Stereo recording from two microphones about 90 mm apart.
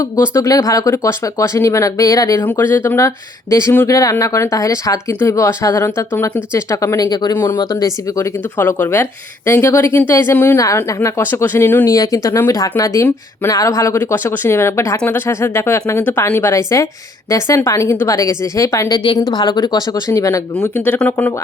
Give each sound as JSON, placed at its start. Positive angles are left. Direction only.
{"t": 0.0, "sound": "speech", "side_deg": 40}
{"t": 2.4, "sound": "speech", "side_deg": 20}
{"t": 7.0, "sound": "speech", "side_deg": 50}
{"t": 7.3, "sound": "speech", "side_deg": 25}
{"t": 7.6, "sound": "speech", "side_deg": 45}
{"t": 8.5, "sound": "speech", "side_deg": 20}
{"t": 10.8, "sound": "speech", "side_deg": 35}
{"t": 11.2, "sound": "speech", "side_deg": 25}
{"t": 11.9, "sound": "speech", "side_deg": 40}
{"t": 18.9, "sound": "speech", "side_deg": 50}
{"t": 20.7, "sound": "speech", "side_deg": 20}